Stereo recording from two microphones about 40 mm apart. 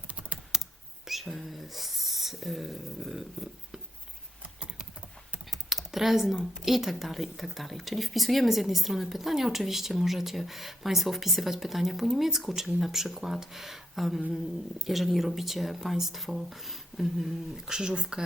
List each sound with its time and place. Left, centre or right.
0.1 s computer keyboard: right
1.0 s speech: centre
5.5 s computer keyboard: centre
6.6 s speech: centre
17.7 s speech: centre